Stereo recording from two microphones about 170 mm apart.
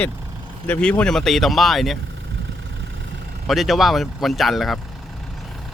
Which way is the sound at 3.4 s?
Centre (ahead or behind).